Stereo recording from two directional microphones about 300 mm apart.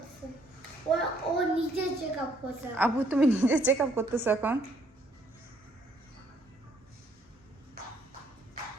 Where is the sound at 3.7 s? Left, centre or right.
Centre.